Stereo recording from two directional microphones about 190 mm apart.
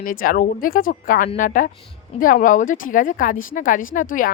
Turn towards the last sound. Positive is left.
turn(degrees=45)  # may be behind; listen again after turning